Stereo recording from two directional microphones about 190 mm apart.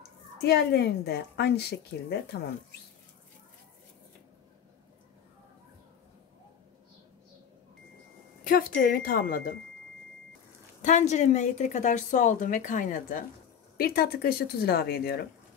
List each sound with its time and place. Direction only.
0.4 s a woman's voice: 60° left (ahead or behind)
8.5 s speech: 50° left (ahead or behind)
10.8 s a woman's voice: 40° left (ahead or behind); by 15.2 s 55° left (ahead or behind)